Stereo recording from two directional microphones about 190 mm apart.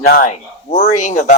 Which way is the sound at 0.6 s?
40° left (ahead or behind).